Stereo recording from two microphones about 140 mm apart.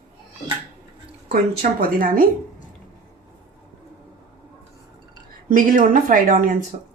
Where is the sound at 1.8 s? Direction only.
85° right.